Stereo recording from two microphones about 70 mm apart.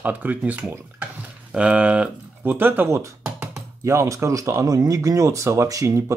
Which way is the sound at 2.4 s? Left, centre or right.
Right.